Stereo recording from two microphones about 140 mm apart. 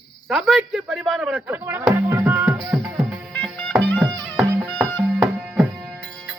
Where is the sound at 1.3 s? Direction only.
10° right (ahead or behind).